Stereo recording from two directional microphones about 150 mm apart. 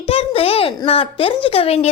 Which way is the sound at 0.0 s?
40° left (ahead or behind).